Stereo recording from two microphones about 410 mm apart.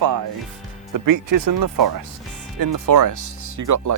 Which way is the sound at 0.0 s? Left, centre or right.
Right.